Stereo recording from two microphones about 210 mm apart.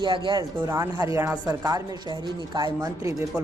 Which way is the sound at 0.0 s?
20° right (ahead or behind).